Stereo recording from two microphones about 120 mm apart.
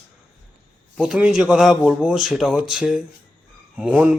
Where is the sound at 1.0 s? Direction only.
5° right (ahead or behind).